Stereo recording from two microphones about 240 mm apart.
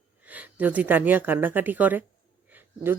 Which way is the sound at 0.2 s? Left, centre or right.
Centre.